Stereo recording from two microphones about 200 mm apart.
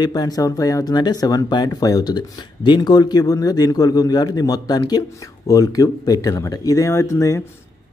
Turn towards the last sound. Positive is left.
turn(degrees=15)  # may be behind; listen again after turning